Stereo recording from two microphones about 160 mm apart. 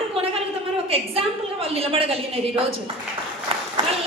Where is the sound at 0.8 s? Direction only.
35° right (ahead or behind).